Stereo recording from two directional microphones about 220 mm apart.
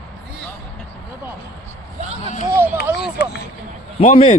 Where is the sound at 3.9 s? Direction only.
25° left (ahead or behind).